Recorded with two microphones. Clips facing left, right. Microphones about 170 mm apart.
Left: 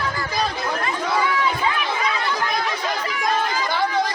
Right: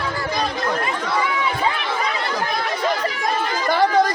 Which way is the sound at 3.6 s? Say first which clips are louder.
Right 10 dB; 45° right (ahead or behind).